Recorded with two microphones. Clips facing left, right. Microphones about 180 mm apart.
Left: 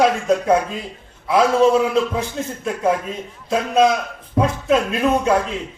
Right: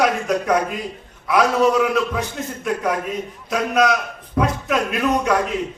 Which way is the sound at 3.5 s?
30° left (ahead or behind).